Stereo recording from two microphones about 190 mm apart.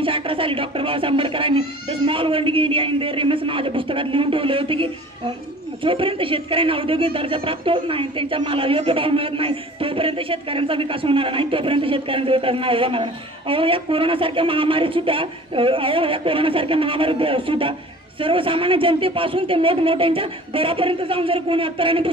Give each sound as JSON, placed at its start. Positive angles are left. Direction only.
{"t": 0.0, "sound": "speech", "side_deg": -30}